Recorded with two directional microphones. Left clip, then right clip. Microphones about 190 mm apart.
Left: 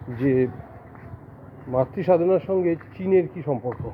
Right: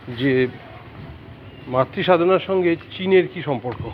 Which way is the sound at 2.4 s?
5° left (ahead or behind).